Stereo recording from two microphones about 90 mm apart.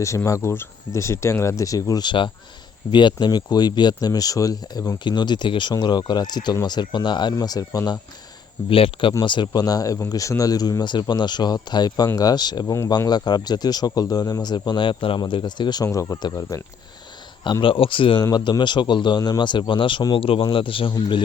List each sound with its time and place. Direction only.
0.3 s speech: 30° left (ahead or behind)
2.0 s speech: 65° left (ahead or behind); by 4.9 s 45° left (ahead or behind)
5.0 s speech: 55° left (ahead or behind)
5.7 s speech: 50° left (ahead or behind)
7.3 s speech: 45° left (ahead or behind)
8.7 s speech: 80° left
9.2 s speech: 60° left (ahead or behind)
15.9 s speech: 35° left (ahead or behind)
16.1 s speech: 50° left (ahead or behind)
17.4 s speech: 65° left (ahead or behind)
18.2 s speech: 50° left (ahead or behind)
20.1 s a man's voice: 90° left
20.4 s speech: 70° left (ahead or behind)